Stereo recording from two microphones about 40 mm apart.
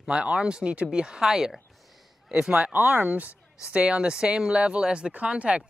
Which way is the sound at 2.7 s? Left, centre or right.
Right.